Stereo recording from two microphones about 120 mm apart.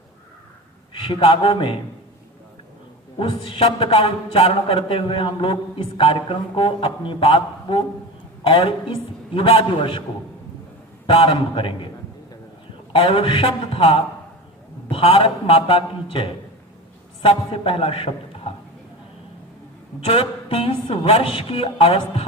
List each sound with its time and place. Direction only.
0.9 s a man's voice: 45° left (ahead or behind)
3.2 s a man's voice: 45° left (ahead or behind)
11.0 s a man's voice: 45° left (ahead or behind)
12.9 s a man's voice: 45° left (ahead or behind)
20.1 s a man's voice: 50° left (ahead or behind)